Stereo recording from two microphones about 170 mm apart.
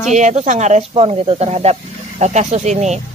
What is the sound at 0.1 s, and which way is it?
Speech, 45° right (ahead or behind).